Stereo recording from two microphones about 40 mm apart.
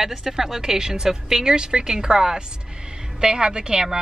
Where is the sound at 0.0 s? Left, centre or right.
Centre.